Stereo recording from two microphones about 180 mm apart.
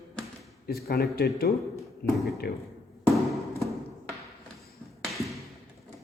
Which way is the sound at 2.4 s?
60° left (ahead or behind).